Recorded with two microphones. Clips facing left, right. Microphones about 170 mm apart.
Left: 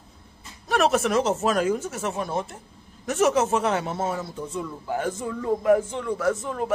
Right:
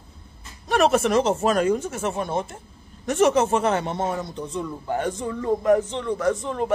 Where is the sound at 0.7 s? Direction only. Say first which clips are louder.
Right 2 dB; centre (ahead or behind).